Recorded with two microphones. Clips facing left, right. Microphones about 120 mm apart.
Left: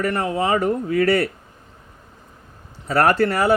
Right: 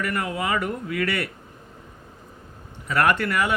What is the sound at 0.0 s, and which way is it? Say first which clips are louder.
Speech: left 5 dB; 30° left (ahead or behind).